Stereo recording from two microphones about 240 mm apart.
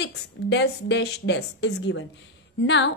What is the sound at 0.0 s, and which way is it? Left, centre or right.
A woman's voice, left.